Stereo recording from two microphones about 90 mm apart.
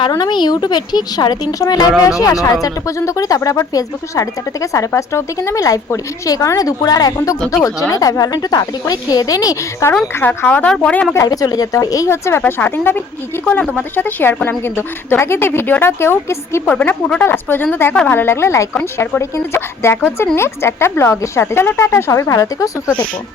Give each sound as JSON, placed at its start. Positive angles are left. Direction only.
{"t": 0.1, "sound": "speech", "side_deg": 55}
{"t": 10.2, "sound": "speech", "side_deg": 20}
{"t": 11.1, "sound": "speech", "side_deg": 40}
{"t": 12.0, "sound": "speech", "side_deg": 30}
{"t": 16.6, "sound": "speech", "side_deg": 20}